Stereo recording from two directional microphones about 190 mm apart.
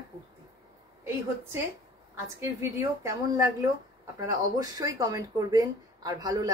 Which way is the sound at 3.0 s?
15° right (ahead or behind).